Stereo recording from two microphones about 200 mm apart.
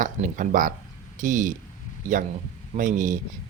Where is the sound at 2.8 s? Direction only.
40° right (ahead or behind).